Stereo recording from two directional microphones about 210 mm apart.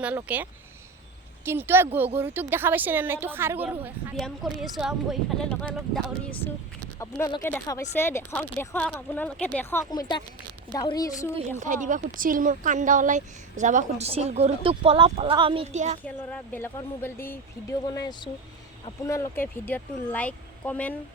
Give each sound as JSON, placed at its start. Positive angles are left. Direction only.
{"t": 0.0, "sound": "a woman's voice", "side_deg": -5}
{"t": 1.5, "sound": "a woman's voice", "side_deg": -10}
{"t": 7.0, "sound": "speech", "side_deg": 15}
{"t": 11.3, "sound": "a woman's voice", "side_deg": -35}
{"t": 16.0, "sound": "speech", "side_deg": 10}